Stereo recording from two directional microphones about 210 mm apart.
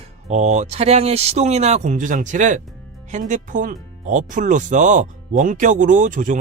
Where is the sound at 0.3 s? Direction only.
35° right (ahead or behind).